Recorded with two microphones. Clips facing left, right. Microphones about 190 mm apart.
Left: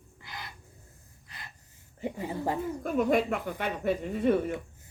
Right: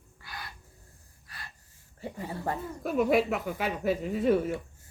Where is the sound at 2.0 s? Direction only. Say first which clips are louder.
Left 3 dB; 15° left (ahead or behind).